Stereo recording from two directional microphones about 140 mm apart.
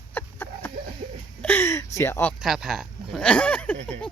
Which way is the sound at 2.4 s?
Centre (ahead or behind).